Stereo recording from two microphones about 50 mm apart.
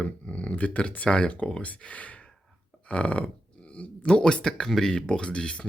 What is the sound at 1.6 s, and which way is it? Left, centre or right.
Speech, left.